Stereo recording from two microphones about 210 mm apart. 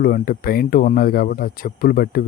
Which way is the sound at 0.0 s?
45° left (ahead or behind).